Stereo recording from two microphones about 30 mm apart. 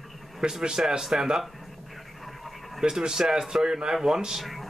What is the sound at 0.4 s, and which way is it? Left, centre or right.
A man's voice, right.